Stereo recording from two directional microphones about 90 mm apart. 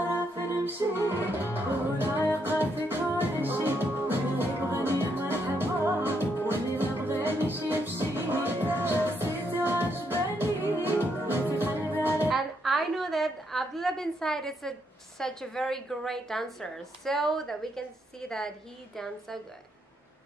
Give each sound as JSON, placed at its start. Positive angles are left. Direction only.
{"t": 0.7, "sound": "music", "side_deg": -25}
{"t": 12.3, "sound": "a woman's voice", "side_deg": 0}